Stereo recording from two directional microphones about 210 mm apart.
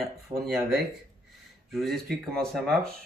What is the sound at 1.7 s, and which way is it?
Speech, centre (ahead or behind).